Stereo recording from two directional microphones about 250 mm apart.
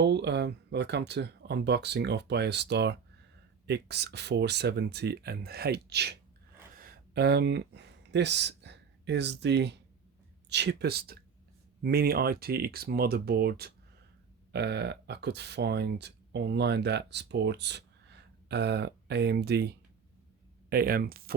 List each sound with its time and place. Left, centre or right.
0.0 s speech: right